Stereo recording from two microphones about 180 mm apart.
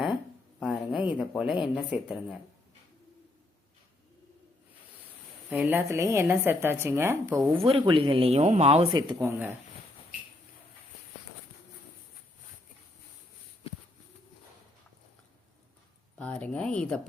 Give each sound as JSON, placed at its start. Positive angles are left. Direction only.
{"t": 0.6, "sound": "a sound", "side_deg": 0}
{"t": 1.2, "sound": "speech", "side_deg": -5}
{"t": 5.5, "sound": "a woman's voice", "side_deg": -10}
{"t": 7.6, "sound": "speech", "side_deg": -30}
{"t": 16.1, "sound": "speech", "side_deg": 5}